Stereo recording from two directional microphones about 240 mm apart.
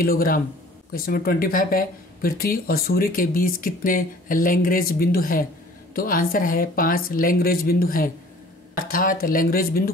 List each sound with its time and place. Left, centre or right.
0.0 s speech: left